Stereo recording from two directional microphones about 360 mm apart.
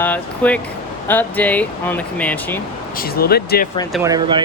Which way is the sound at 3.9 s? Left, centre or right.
Centre.